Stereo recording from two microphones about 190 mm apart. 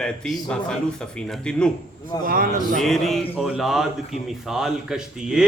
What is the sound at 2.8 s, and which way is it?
A man's voice, centre (ahead or behind).